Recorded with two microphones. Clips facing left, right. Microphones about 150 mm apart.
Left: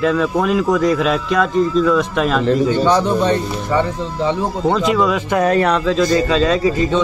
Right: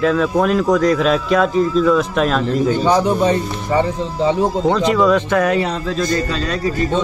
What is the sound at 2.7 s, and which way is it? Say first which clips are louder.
A man's voice: even; 10° right (ahead or behind).